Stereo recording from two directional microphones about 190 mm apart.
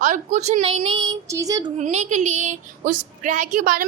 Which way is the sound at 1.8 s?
40° right (ahead or behind).